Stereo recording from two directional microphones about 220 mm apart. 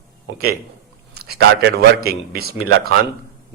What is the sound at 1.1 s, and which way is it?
A man's voice, 45° right (ahead or behind).